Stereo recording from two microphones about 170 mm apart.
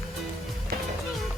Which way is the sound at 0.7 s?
65° right (ahead or behind).